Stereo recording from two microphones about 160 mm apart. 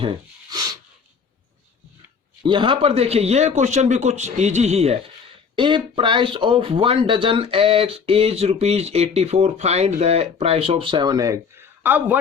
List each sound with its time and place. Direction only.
0.5 s a sound: 25° right (ahead or behind)
2.4 s a man's voice: 30° right (ahead or behind)
11.8 s speech: 10° right (ahead or behind)